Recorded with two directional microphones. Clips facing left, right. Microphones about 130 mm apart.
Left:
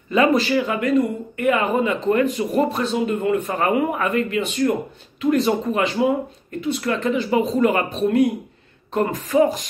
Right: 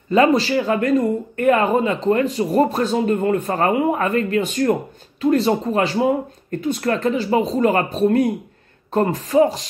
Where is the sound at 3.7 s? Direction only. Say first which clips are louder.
Right 2 dB; 30° right (ahead or behind).